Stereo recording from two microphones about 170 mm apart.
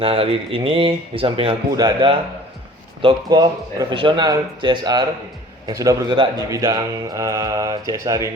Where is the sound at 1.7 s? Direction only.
20° right (ahead or behind).